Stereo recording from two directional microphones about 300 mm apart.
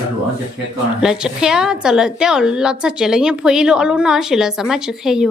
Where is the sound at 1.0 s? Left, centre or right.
Centre.